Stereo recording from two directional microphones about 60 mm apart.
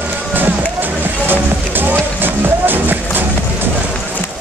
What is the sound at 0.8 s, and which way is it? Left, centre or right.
Music, right.